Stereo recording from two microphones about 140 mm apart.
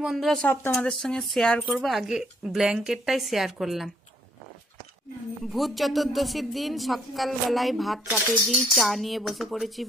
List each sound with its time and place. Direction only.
0.0 s speech: centre (ahead or behind)
0.5 s a woman's voice: 15° left (ahead or behind)
0.7 s speech: 5° left (ahead or behind)
5.5 s speech: centre (ahead or behind)
8.5 s speech: 50° right (ahead or behind)
8.7 s speech: centre (ahead or behind)